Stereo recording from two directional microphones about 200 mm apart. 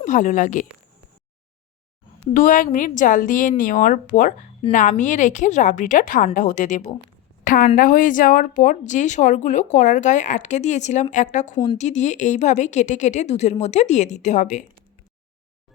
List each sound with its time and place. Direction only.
0.0 s speech: 40° left (ahead or behind)
2.3 s speech: 40° left (ahead or behind)
7.4 s a sound: 45° left (ahead or behind)
7.8 s speech: 40° left (ahead or behind)
11.5 s a woman's voice: 20° left (ahead or behind)
11.8 s speech: 35° left (ahead or behind)